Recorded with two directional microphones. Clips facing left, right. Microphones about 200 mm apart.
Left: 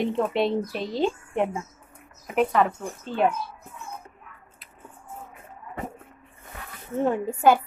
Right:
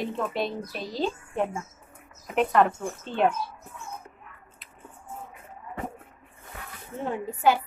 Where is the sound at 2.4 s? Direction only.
5° left (ahead or behind).